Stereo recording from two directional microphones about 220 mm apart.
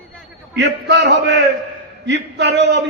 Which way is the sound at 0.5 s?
50° right (ahead or behind).